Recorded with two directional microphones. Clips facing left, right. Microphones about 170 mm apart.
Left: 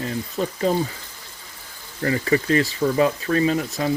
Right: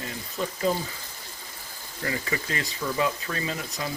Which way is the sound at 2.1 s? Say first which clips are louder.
Left 11 dB; 35° left (ahead or behind).